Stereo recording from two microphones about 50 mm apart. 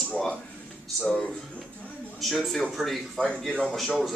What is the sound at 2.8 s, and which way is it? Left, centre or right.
Speech, centre.